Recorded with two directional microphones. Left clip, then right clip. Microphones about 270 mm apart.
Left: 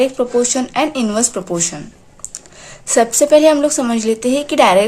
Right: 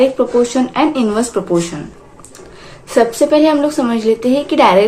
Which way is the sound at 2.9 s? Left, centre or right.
Left.